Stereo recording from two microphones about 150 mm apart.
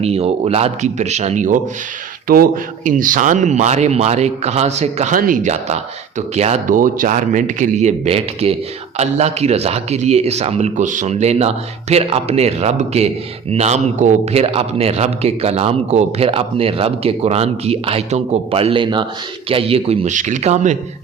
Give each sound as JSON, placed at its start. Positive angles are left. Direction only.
{"t": 0.0, "sound": "a man's voice", "side_deg": -45}
{"t": 2.2, "sound": "a man's voice", "side_deg": -75}
{"t": 5.1, "sound": "a man's voice", "side_deg": -65}
{"t": 6.7, "sound": "a man's voice", "side_deg": -65}